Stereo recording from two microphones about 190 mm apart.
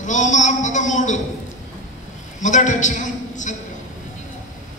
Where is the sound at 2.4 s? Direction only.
40° left (ahead or behind).